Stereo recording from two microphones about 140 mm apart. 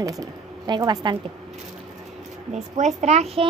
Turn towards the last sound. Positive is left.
turn(degrees=-50)  # may be behind; listen again after turning